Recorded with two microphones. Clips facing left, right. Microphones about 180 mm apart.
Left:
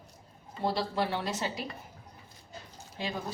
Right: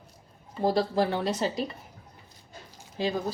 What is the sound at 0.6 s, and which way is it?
A woman's voice, 40° right (ahead or behind).